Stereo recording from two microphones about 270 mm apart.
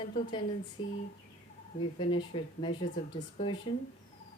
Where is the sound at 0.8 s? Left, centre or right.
Centre.